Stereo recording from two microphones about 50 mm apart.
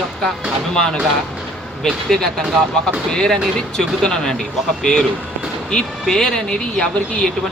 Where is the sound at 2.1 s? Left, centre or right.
Centre.